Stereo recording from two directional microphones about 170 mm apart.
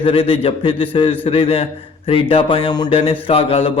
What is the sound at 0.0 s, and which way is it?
A man's voice, 30° left (ahead or behind).